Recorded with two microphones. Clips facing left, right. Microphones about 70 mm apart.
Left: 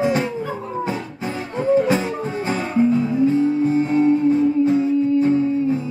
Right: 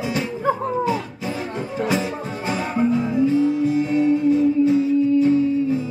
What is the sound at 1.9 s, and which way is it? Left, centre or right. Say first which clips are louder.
Music: left 3 dB; left.